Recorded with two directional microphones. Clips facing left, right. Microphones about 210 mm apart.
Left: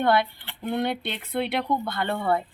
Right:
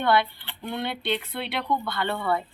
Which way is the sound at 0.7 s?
40° left (ahead or behind).